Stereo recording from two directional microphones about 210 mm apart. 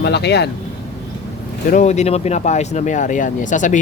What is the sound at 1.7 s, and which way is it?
Speech, 35° left (ahead or behind).